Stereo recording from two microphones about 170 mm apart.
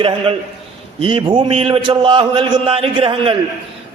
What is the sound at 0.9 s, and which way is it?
A man's voice, 30° right (ahead or behind).